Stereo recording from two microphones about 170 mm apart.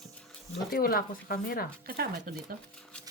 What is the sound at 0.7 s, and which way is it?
Speech, 60° left (ahead or behind).